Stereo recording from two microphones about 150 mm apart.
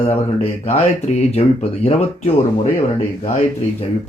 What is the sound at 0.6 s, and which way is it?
Speech, 45° left (ahead or behind).